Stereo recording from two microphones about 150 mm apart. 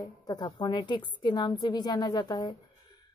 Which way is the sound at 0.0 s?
25° left (ahead or behind).